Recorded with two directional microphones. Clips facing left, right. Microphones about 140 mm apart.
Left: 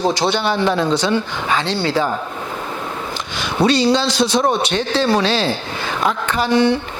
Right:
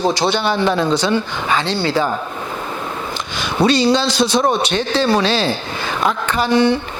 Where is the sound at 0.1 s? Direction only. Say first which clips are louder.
Right 1 dB; 10° right (ahead or behind).